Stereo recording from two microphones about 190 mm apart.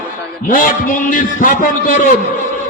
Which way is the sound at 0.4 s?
45° left (ahead or behind).